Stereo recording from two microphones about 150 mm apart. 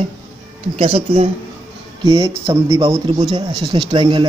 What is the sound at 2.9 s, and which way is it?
A man's voice, 25° right (ahead or behind).